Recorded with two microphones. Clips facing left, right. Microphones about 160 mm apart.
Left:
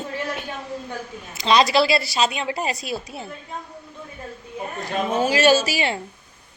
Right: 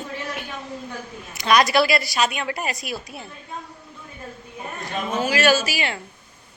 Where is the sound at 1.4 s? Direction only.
20° left (ahead or behind).